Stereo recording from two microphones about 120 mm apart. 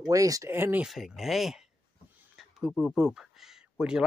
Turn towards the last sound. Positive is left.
turn(degrees=-5)  # may be behind; listen again after turning